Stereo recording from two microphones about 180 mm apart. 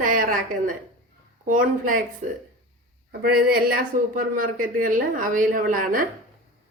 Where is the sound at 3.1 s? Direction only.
55° right (ahead or behind).